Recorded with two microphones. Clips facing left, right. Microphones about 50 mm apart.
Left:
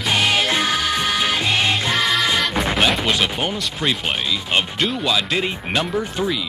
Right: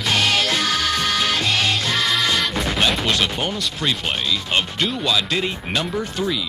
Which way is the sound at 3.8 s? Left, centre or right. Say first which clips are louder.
Left 2 dB; centre.